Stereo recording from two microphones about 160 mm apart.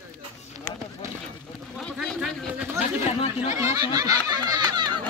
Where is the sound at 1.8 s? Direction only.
5° left (ahead or behind).